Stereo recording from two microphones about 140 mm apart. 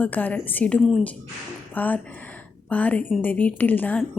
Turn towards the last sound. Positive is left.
turn(degrees=10)  # may be behind; listen again after turning